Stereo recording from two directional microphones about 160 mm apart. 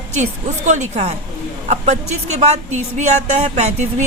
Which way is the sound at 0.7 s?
45° right (ahead or behind).